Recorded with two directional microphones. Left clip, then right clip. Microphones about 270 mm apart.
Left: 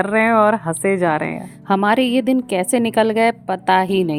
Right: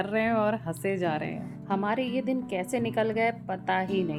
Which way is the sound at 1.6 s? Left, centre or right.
Left.